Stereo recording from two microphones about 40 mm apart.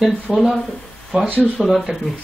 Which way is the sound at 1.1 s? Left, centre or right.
Centre.